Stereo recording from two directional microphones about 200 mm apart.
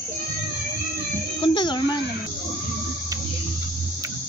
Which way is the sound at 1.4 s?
25° left (ahead or behind).